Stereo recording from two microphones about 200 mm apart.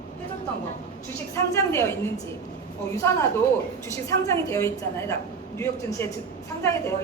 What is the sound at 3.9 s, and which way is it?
A woman's voice, 15° left (ahead or behind).